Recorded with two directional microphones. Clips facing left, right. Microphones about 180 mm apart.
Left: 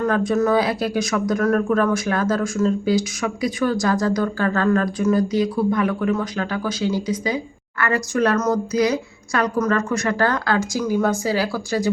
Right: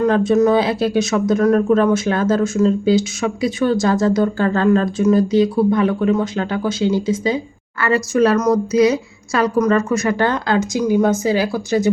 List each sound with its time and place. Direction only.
0.3 s speech: 20° right (ahead or behind)